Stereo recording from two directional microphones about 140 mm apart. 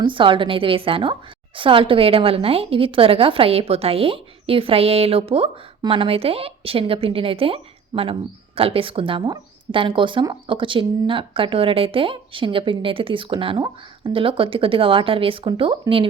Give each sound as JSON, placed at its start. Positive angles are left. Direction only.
{"t": 0.0, "sound": "a woman's voice", "side_deg": -35}